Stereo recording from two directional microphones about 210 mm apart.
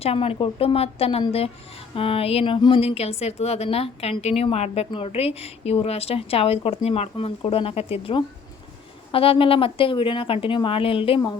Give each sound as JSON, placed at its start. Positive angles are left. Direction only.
{"t": 0.0, "sound": "speech", "side_deg": 25}